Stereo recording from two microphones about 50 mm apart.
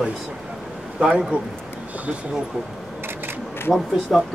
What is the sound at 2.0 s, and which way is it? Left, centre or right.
Speech, right.